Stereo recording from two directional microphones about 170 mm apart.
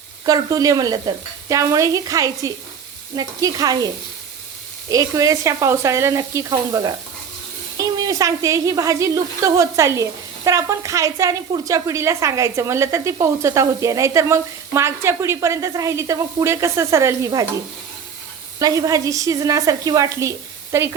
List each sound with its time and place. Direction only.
0.3 s speech: 20° right (ahead or behind)
18.6 s speech: 20° right (ahead or behind)